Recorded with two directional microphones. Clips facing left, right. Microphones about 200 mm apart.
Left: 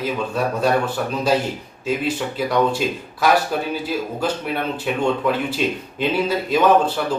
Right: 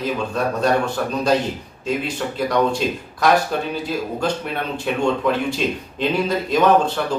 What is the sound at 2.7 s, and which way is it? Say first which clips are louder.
Speech: even; 5° left (ahead or behind).